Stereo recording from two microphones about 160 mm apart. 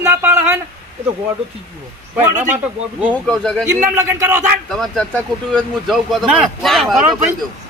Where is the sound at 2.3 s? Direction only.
50° right (ahead or behind).